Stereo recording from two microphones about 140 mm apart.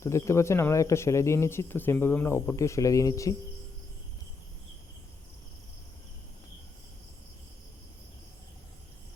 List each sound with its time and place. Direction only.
0.0 s speech: 20° left (ahead or behind)